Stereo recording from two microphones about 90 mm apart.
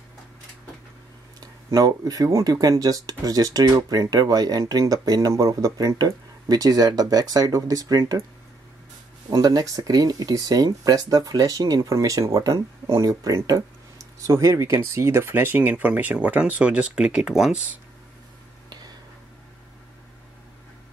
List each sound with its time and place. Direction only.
1.4 s speech: 40° right (ahead or behind)
9.3 s speech: 45° right (ahead or behind); by 17.6 s 5° right (ahead or behind)